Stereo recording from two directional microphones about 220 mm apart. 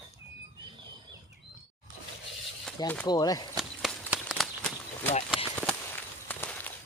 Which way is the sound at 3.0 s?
15° left (ahead or behind).